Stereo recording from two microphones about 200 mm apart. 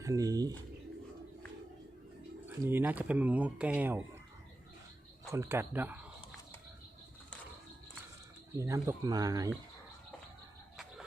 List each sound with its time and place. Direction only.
0.0 s speech: 15° right (ahead or behind)
2.6 s speech: 10° right (ahead or behind)
5.3 s speech: 10° right (ahead or behind)
8.5 s speech: 15° right (ahead or behind)